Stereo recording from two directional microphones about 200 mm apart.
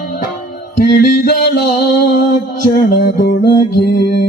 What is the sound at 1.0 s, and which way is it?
Music, 50° left (ahead or behind).